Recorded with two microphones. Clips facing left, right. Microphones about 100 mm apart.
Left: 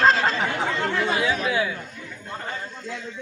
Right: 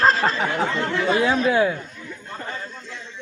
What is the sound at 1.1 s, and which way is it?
Speech, 45° right (ahead or behind).